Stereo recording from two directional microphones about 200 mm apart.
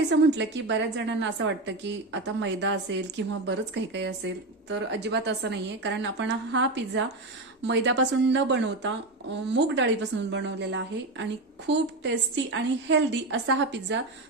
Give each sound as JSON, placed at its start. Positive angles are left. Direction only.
{"t": 0.1, "sound": "a woman's voice", "side_deg": -60}